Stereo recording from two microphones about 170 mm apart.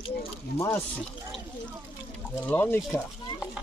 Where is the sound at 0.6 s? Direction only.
15° left (ahead or behind).